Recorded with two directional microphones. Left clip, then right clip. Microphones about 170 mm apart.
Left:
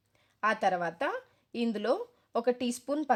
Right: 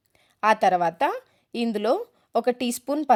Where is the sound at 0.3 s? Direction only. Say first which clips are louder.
Right 9 dB; 25° right (ahead or behind).